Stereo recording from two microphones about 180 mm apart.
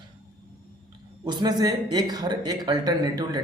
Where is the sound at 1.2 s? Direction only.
25° right (ahead or behind).